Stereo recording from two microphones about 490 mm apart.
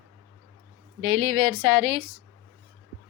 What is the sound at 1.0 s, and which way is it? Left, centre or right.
Speech, right.